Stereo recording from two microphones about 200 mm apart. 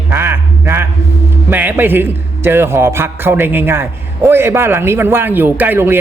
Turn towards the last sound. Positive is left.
turn(degrees=-10)  # may be behind; listen again after turning